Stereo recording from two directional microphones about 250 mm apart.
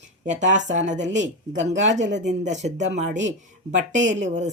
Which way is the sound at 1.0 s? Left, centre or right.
Right.